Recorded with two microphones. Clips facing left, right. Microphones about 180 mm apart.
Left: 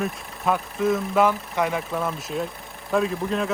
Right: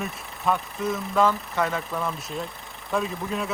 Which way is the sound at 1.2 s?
15° left (ahead or behind).